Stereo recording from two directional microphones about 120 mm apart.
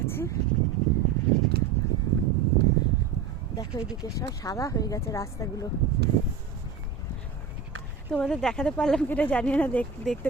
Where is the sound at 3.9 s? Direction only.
30° left (ahead or behind).